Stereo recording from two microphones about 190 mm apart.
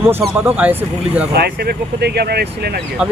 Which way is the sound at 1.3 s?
55° right (ahead or behind).